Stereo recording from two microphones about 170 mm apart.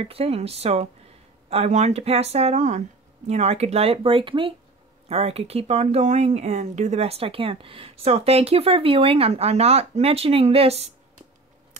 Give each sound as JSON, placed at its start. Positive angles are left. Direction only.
{"t": 0.0, "sound": "speech", "side_deg": -35}